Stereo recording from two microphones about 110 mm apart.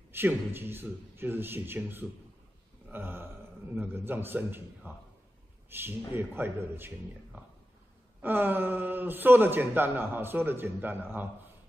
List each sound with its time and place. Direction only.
0.1 s speech: 20° right (ahead or behind)
2.9 s a sound: 20° right (ahead or behind)
3.7 s speech: 20° right (ahead or behind)
8.2 s speech: 20° right (ahead or behind)